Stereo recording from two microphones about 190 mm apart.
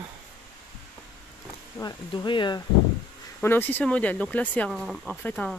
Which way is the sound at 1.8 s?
20° left (ahead or behind).